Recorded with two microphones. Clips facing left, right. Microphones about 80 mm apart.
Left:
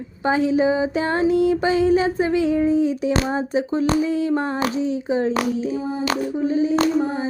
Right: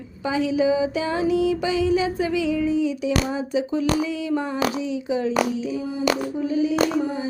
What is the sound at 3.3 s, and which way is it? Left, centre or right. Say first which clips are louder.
A woman's voice: left 2 dB; left.